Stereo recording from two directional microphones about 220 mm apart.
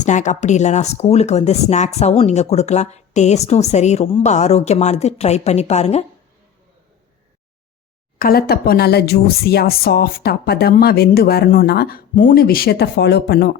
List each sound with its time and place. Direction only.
0.0 s speech: 35° left (ahead or behind)
8.2 s a woman's voice: 45° left (ahead or behind)